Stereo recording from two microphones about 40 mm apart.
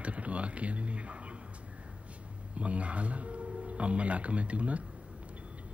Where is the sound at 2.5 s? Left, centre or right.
Right.